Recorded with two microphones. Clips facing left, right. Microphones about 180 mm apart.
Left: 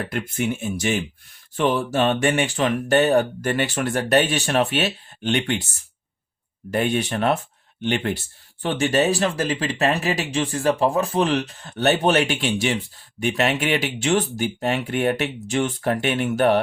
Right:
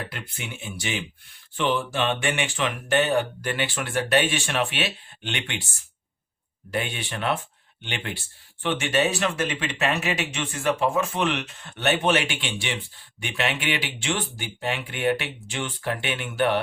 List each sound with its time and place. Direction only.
0.1 s speech: 45° left (ahead or behind)
6.7 s speech: 45° left (ahead or behind)